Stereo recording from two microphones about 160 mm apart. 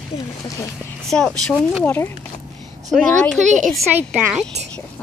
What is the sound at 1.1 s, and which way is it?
Speech, 5° left (ahead or behind).